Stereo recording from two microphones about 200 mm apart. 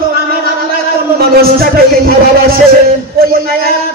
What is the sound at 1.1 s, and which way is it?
Speech, 50° right (ahead or behind).